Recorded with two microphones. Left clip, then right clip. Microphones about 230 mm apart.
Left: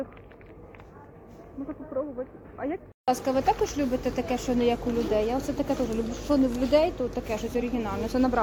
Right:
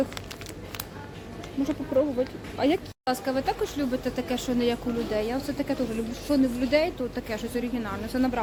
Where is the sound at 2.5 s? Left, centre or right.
Right.